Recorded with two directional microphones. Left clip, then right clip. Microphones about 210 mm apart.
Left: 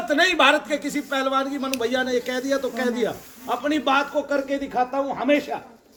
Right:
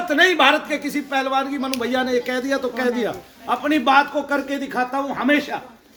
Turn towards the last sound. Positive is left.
turn(degrees=-20)  # may be behind; listen again after turning